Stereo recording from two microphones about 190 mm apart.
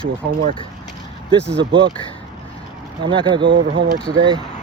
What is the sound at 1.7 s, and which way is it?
Speech, 25° right (ahead or behind).